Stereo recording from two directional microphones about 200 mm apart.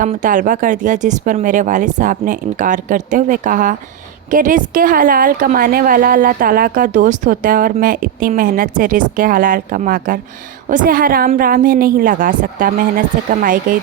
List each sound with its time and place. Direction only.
0.0 s a woman's voice: 40° right (ahead or behind)